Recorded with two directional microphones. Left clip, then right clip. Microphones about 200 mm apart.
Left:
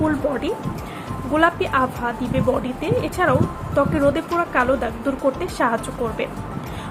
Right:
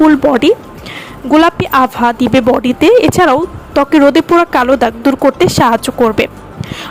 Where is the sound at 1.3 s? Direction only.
50° right (ahead or behind).